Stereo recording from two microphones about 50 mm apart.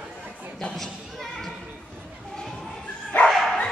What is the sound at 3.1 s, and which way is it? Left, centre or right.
Bow-wow, left.